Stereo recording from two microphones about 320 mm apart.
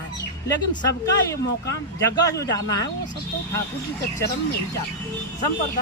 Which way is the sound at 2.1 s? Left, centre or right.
Centre.